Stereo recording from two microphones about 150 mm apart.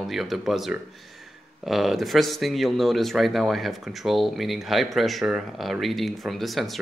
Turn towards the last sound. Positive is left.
turn(degrees=0)  # may be behind; listen again after turning